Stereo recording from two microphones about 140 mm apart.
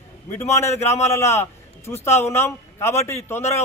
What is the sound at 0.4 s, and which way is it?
A man's voice, 20° left (ahead or behind).